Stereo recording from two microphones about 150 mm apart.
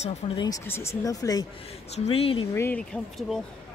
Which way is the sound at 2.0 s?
40° left (ahead or behind).